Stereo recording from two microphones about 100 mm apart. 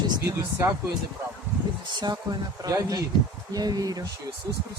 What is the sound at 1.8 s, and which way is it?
Speech, 45° right (ahead or behind).